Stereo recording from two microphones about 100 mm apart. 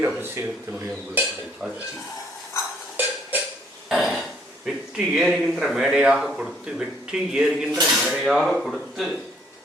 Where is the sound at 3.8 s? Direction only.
Centre (ahead or behind).